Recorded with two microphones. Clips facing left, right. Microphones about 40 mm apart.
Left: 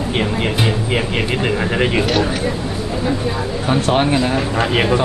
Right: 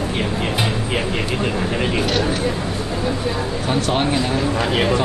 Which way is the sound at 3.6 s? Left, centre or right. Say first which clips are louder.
Left 4 dB; centre.